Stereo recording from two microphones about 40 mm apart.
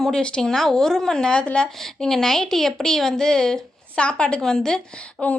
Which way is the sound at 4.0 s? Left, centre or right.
Left.